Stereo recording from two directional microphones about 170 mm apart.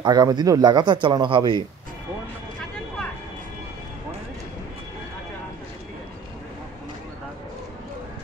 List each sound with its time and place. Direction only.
0.0 s speech: 25° right (ahead or behind)